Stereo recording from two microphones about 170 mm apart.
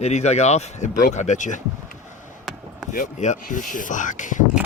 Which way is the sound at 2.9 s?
45° left (ahead or behind).